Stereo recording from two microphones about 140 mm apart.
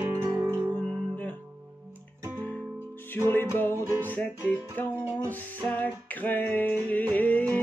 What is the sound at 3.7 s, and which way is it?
Music, 20° right (ahead or behind).